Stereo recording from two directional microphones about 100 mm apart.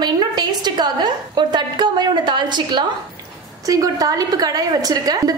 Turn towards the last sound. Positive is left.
turn(degrees=-40)  # may be behind; listen again after turning